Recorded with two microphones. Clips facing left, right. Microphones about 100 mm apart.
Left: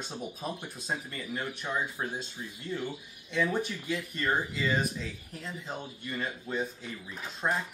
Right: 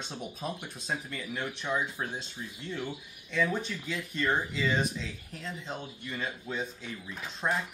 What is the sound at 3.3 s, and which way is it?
Speech, 10° left (ahead or behind).